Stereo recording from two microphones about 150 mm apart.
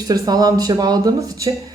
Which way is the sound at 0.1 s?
25° right (ahead or behind).